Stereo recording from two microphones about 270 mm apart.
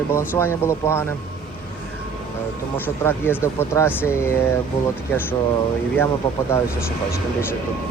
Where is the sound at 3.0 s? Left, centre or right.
Centre.